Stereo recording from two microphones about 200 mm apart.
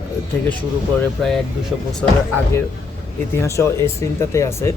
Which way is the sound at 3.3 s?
15° left (ahead or behind).